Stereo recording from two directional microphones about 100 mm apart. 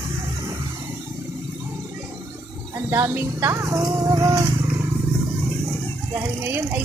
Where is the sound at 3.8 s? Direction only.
40° right (ahead or behind).